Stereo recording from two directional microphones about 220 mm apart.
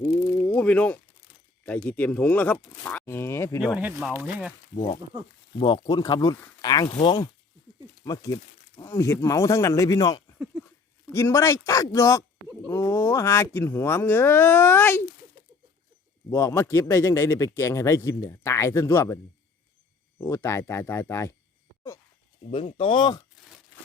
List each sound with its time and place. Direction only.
0.2 s a sound: 5° left (ahead or behind)
1.6 s speech: 5° left (ahead or behind)
3.8 s speech: 5° right (ahead or behind)
5.5 s speech: 25° left (ahead or behind)
10.3 s a sound: 5° right (ahead or behind)
11.1 s speech: 10° left (ahead or behind)
16.3 s speech: 15° left (ahead or behind)
22.4 s speech: 25° left (ahead or behind)